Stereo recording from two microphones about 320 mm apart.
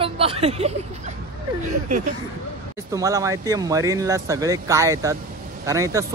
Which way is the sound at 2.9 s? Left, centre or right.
Centre.